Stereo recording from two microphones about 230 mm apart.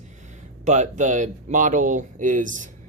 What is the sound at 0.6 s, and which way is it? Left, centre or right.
Speech, right.